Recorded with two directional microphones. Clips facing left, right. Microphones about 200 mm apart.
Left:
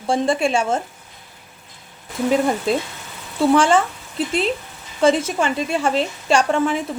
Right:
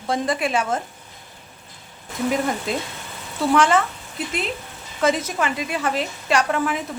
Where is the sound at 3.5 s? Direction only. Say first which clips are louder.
Left 2 dB; 30° left (ahead or behind).